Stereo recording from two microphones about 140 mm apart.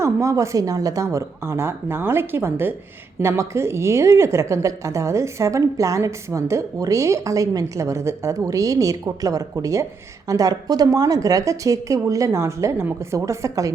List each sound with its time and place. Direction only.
0.0 s a woman's voice: 25° right (ahead or behind)